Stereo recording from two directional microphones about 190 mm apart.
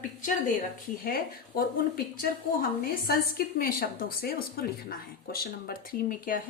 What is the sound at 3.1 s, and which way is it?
A woman's voice, 50° left (ahead or behind).